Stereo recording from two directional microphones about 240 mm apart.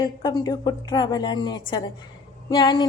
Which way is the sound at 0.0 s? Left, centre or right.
Centre.